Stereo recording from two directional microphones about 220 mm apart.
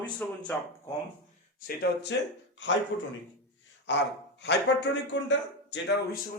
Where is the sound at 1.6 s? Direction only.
50° left (ahead or behind).